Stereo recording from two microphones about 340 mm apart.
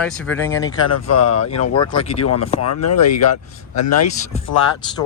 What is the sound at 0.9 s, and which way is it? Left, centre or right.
Speech, left.